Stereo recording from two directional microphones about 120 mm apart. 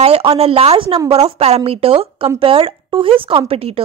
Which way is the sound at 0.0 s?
55° right (ahead or behind).